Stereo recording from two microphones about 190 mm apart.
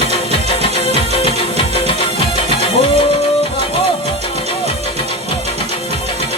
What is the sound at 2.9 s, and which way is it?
Music, 30° left (ahead or behind).